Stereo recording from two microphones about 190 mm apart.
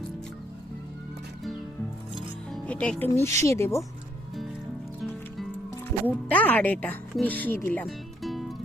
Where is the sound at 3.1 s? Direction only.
15° left (ahead or behind).